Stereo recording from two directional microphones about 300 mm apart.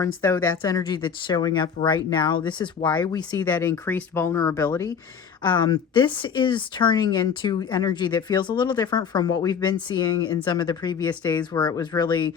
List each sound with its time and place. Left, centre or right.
0.2 s speech: centre